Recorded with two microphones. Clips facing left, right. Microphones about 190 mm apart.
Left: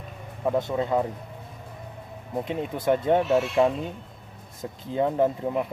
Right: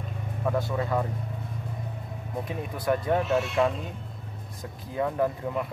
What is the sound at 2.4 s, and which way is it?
Speech, 25° left (ahead or behind).